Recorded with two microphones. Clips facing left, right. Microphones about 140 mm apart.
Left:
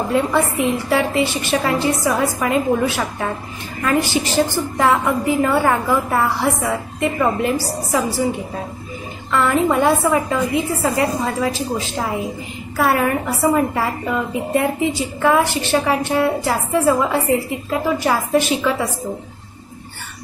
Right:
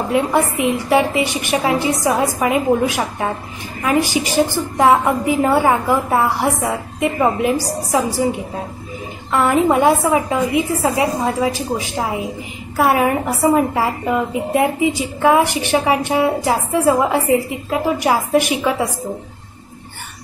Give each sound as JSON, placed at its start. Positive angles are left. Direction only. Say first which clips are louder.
{"t": 0.1, "sound": "a woman's voice", "louder": "right 2 dB", "side_deg": -15}
{"t": 9.3, "sound": "a woman's voice", "louder": "right 2 dB", "side_deg": -20}